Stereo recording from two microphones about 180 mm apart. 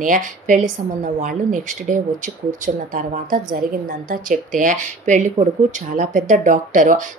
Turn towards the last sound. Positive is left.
turn(degrees=-45)  # may be behind; listen again after turning